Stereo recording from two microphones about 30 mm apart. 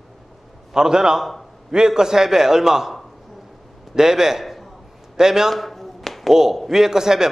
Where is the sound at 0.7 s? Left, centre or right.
Right.